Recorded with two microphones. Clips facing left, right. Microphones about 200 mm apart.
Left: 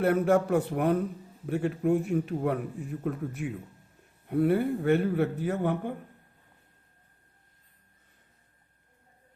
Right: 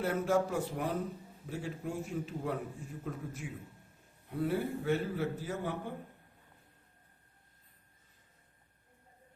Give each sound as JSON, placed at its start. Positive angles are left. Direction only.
{"t": 0.0, "sound": "a man's voice", "side_deg": 60}